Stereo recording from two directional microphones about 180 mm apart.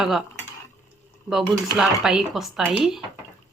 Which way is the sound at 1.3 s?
Centre (ahead or behind).